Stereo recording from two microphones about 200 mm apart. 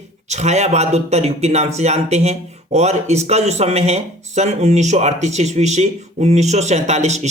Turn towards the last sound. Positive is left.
turn(degrees=-35)  # may be behind; listen again after turning